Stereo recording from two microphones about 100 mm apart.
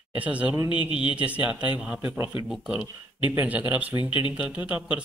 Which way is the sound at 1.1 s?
15° right (ahead or behind).